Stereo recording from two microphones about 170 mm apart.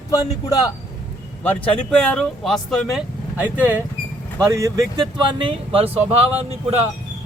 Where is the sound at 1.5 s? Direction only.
5° left (ahead or behind).